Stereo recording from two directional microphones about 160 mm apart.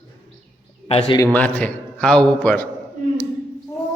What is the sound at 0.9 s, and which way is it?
Speech, 35° left (ahead or behind).